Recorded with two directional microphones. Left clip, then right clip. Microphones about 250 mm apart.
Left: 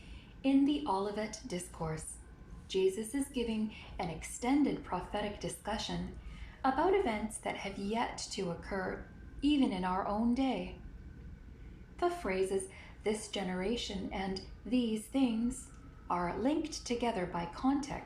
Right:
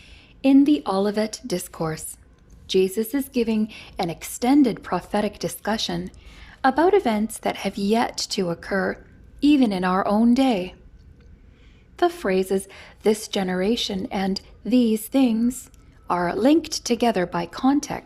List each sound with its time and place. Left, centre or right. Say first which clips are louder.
0.4 s a woman's voice: right 13 dB; right
2.7 s a woman's voice: right 11 dB; right
11.9 s a woman's voice: right 12 dB; right